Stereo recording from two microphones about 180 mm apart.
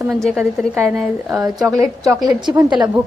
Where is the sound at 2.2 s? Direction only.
20° right (ahead or behind).